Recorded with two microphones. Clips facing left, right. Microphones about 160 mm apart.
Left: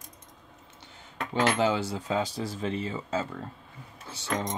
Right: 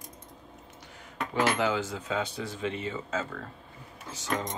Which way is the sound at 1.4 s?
30° left (ahead or behind).